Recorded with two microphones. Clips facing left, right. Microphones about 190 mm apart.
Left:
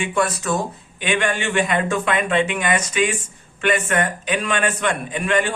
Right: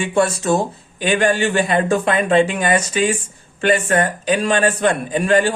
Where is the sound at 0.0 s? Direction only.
30° right (ahead or behind).